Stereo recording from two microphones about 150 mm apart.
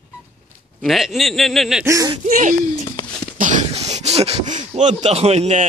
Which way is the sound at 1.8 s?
20° right (ahead or behind).